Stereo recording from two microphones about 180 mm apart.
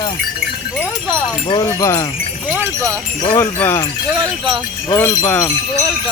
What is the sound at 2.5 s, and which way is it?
Speech, 15° right (ahead or behind).